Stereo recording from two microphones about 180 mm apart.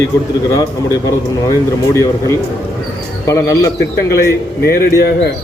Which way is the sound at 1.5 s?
15° left (ahead or behind).